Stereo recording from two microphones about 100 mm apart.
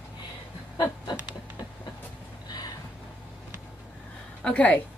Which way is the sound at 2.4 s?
40° left (ahead or behind).